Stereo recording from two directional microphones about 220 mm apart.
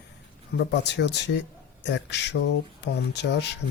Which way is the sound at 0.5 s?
50° left (ahead or behind).